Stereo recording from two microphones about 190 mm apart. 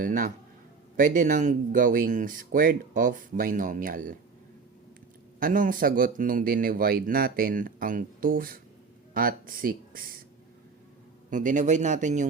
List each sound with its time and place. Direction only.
0.0 s speech: 45° right (ahead or behind)
5.4 s speech: 45° right (ahead or behind)
11.3 s a man's voice: 45° right (ahead or behind)